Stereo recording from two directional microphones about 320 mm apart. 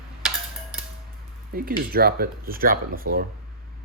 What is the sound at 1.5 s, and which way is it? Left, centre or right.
Speech, right.